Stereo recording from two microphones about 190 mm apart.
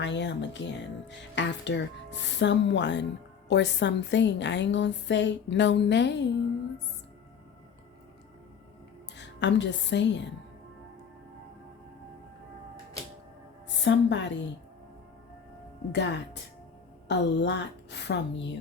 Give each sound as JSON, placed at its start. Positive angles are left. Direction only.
{"t": 0.0, "sound": "speech", "side_deg": 70}
{"t": 9.1, "sound": "a woman's voice", "side_deg": 70}
{"t": 13.8, "sound": "speech", "side_deg": 70}
{"t": 15.9, "sound": "a woman's voice", "side_deg": 65}